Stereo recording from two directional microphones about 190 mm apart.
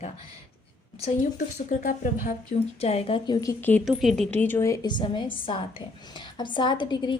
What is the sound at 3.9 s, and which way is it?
A woman's voice, centre (ahead or behind).